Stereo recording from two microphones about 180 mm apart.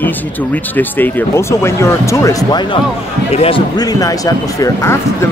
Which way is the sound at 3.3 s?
30° left (ahead or behind).